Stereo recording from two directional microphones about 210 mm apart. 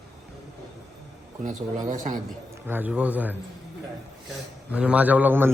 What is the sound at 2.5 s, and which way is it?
Speech, 10° right (ahead or behind).